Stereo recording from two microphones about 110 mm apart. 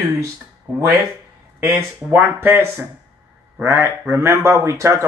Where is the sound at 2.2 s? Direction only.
20° right (ahead or behind).